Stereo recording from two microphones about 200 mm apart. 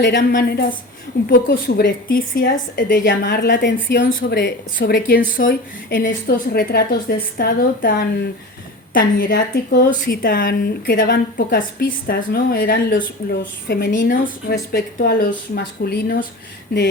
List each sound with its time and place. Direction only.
0.2 s a woman's voice: 50° left (ahead or behind)
4.0 s a woman's voice: 50° left (ahead or behind)
14.7 s a woman's voice: 50° left (ahead or behind)